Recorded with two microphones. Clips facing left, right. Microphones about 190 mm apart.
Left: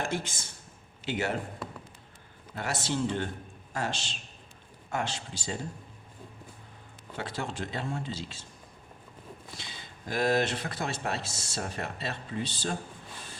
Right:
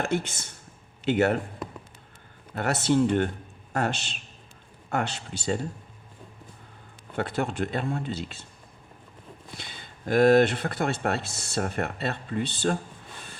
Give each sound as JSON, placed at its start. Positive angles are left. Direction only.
{"t": 0.0, "sound": "speech", "side_deg": -60}
{"t": 2.6, "sound": "speech", "side_deg": -60}
{"t": 7.2, "sound": "speech", "side_deg": -60}
{"t": 9.6, "sound": "speech", "side_deg": -55}